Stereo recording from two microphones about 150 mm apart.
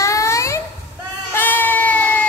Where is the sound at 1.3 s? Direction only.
10° left (ahead or behind).